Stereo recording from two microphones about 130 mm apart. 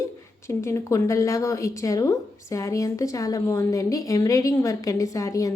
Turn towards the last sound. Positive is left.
turn(degrees=25)  # may be behind; listen again after turning